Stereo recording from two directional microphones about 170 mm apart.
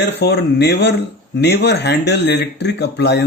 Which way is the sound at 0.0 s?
80° left.